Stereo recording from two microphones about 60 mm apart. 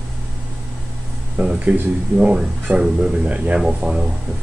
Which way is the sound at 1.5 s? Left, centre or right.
Right.